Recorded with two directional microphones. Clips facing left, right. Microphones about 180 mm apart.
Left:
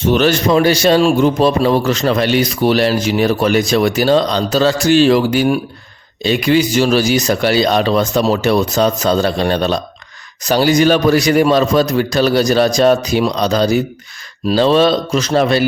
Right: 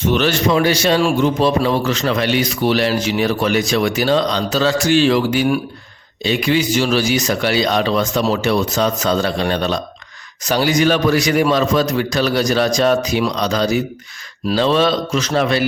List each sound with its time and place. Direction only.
0.0 s a man's voice: 40° left (ahead or behind)